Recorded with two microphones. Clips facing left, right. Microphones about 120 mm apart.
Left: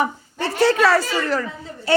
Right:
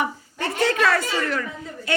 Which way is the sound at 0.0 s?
35° left (ahead or behind).